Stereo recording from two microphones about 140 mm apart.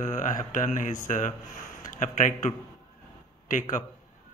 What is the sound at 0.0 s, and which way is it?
Speech, 65° left (ahead or behind).